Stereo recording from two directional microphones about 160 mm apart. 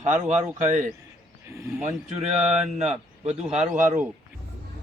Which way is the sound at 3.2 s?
40° right (ahead or behind).